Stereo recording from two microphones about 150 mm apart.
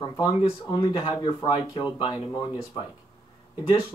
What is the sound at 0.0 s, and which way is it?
Speech, 30° left (ahead or behind).